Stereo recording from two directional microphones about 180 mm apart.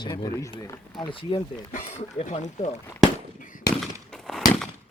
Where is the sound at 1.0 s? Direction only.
30° left (ahead or behind).